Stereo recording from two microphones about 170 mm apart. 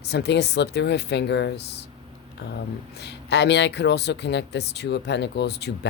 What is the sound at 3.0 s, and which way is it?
Speech, 85° left.